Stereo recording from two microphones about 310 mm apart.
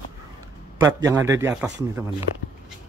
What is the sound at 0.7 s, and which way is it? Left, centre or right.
Speech, centre.